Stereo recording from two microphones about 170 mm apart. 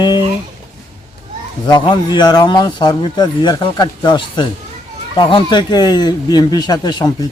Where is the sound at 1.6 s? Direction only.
30° left (ahead or behind).